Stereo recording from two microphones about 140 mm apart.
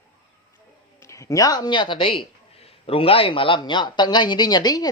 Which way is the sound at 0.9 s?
20° left (ahead or behind).